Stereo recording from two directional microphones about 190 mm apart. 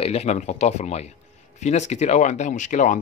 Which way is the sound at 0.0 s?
35° left (ahead or behind).